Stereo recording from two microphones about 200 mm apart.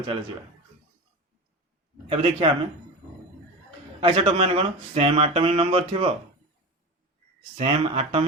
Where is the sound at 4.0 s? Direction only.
25° right (ahead or behind).